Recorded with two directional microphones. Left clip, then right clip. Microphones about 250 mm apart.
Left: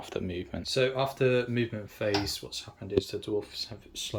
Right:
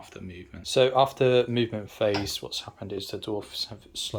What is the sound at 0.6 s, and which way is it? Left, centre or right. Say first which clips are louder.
Speech: right 7 dB; centre.